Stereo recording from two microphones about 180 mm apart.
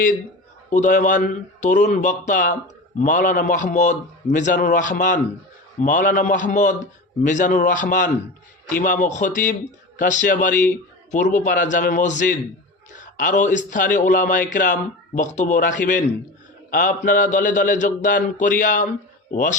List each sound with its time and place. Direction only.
0.7 s a man's voice: 45° left (ahead or behind)